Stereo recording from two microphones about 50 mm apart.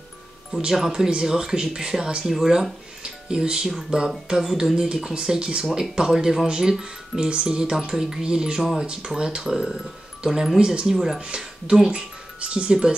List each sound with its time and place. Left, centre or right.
0.6 s speech: centre
3.0 s music: centre
3.9 s speech: centre
11.1 s speech: centre